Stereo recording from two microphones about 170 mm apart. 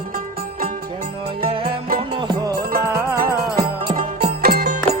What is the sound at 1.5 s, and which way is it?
Music, 30° right (ahead or behind).